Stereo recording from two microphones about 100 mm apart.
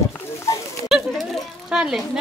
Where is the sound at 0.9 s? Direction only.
5° right (ahead or behind).